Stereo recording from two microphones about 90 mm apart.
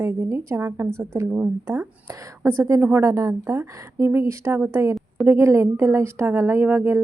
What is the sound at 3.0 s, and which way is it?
A woman's voice, 35° right (ahead or behind).